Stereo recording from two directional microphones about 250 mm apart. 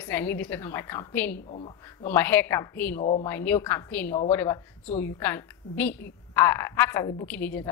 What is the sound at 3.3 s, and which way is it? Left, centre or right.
Speech, centre.